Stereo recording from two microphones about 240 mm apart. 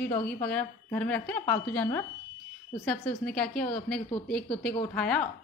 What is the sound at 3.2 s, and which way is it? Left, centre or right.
Speech, left.